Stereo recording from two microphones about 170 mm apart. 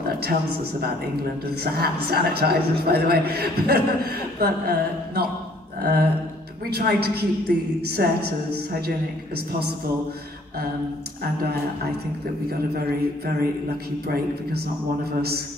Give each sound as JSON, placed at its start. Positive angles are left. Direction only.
{"t": 0.2, "sound": "a man's voice", "side_deg": -65}
{"t": 5.8, "sound": "a sound", "side_deg": -65}
{"t": 6.7, "sound": "a woman's voice", "side_deg": -65}
{"t": 14.0, "sound": "a woman's voice", "side_deg": -65}